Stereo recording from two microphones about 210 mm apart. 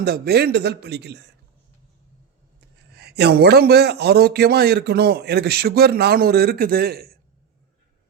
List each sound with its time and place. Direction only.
0.0 s a man's voice: 50° right (ahead or behind)
2.9 s a man's voice: 50° right (ahead or behind)